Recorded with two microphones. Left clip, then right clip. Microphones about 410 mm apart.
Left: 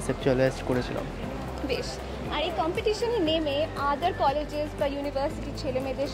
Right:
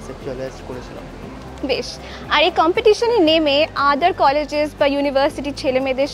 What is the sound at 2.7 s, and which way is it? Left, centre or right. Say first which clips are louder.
Speech: right 12 dB; right.